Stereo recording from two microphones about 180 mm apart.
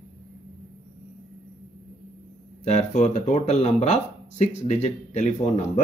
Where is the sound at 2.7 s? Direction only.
40° left (ahead or behind).